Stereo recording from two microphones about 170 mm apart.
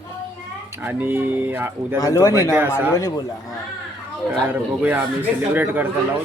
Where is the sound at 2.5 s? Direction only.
10° right (ahead or behind).